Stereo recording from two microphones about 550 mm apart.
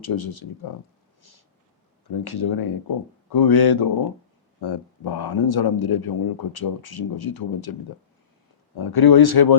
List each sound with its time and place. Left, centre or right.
0.0 s speech: left
2.0 s speech: left